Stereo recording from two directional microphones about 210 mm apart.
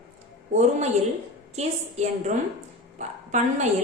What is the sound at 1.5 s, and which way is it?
A woman's voice, 30° right (ahead or behind).